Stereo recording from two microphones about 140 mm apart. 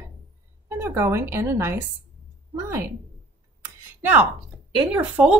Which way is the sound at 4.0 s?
15° right (ahead or behind).